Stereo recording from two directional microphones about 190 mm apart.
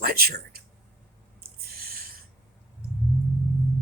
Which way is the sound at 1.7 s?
50° right (ahead or behind).